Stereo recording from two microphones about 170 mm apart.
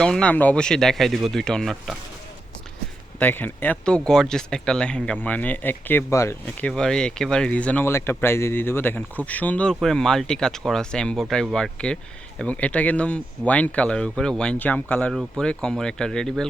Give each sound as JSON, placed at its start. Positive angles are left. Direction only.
{"t": 0.0, "sound": "speech", "side_deg": 5}
{"t": 3.2, "sound": "speech", "side_deg": 10}